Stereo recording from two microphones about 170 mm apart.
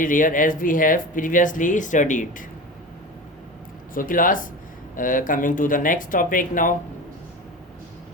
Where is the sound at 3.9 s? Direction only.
55° left (ahead or behind).